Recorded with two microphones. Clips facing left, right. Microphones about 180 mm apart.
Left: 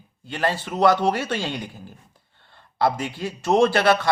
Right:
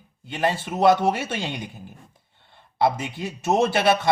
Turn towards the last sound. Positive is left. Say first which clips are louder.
# left 2 dB
turn(degrees=-20)  # may be behind; listen again after turning